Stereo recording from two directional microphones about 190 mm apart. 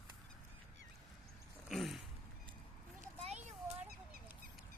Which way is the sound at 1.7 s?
Centre (ahead or behind).